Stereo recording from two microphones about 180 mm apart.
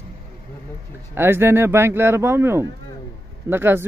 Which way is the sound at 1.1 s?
10° right (ahead or behind).